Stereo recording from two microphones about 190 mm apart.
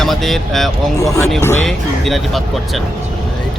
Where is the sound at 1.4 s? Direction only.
15° left (ahead or behind).